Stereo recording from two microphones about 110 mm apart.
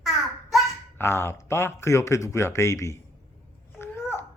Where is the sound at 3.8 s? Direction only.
20° left (ahead or behind).